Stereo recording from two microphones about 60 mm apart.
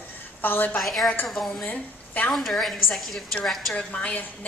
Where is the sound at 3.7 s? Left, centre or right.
Left.